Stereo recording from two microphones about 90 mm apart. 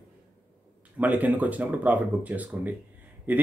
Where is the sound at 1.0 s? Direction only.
20° right (ahead or behind).